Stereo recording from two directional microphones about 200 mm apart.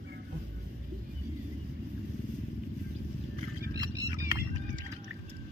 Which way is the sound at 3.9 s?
15° right (ahead or behind).